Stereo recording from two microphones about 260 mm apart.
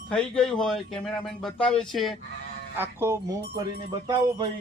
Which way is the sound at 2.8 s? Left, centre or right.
Centre.